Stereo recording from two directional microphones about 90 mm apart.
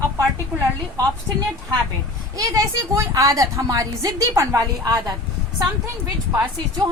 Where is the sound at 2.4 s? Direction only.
40° right (ahead or behind).